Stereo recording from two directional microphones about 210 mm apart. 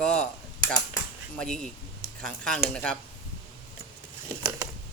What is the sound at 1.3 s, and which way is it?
Speech, 5° left (ahead or behind).